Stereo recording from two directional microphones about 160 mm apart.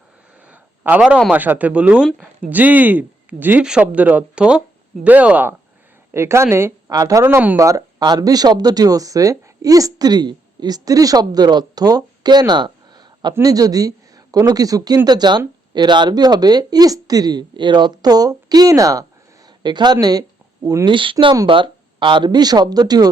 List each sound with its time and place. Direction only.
0.4 s speech: 10° right (ahead or behind); by 23.0 s 25° right (ahead or behind)